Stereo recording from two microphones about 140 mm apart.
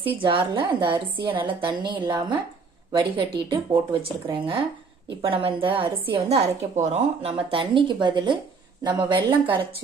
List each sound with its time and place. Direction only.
0.2 s a woman's voice: 40° right (ahead or behind)